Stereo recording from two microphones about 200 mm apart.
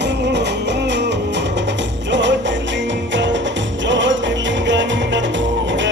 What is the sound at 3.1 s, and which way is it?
Music, 65° right (ahead or behind).